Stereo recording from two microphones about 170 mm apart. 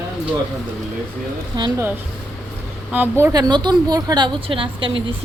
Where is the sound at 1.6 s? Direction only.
25° right (ahead or behind).